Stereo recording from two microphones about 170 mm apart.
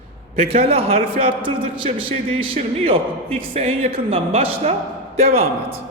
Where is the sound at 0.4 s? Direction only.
35° right (ahead or behind).